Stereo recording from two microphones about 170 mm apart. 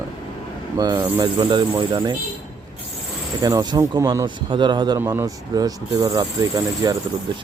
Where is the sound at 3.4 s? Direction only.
25° right (ahead or behind).